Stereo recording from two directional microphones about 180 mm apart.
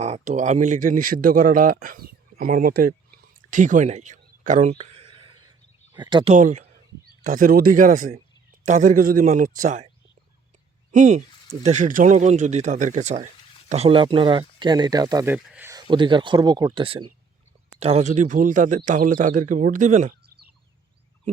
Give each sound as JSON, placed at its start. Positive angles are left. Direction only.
{"t": 0.0, "sound": "speech", "side_deg": -40}
{"t": 4.8, "sound": "a sound", "side_deg": -30}
{"t": 6.0, "sound": "speech", "side_deg": -25}
{"t": 6.3, "sound": "speech", "side_deg": -45}
{"t": 10.9, "sound": "speech", "side_deg": -40}
{"t": 15.4, "sound": "a sound", "side_deg": -10}
{"t": 15.7, "sound": "speech", "side_deg": -25}